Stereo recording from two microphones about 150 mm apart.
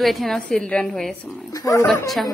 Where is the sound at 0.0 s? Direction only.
Centre (ahead or behind).